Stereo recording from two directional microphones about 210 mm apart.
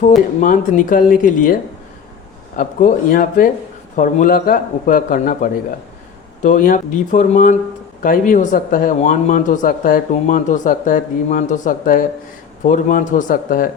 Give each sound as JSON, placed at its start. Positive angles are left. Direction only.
{"t": 0.4, "sound": "speech", "side_deg": 35}
{"t": 2.6, "sound": "speech", "side_deg": 40}